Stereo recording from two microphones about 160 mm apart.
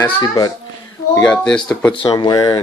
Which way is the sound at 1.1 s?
5° left (ahead or behind).